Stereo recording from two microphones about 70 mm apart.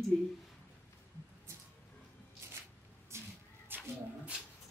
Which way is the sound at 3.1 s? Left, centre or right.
Right.